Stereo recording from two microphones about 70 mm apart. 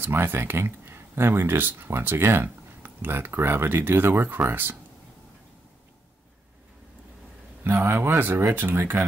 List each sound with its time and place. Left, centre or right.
0.0 s speech: right
7.6 s speech: right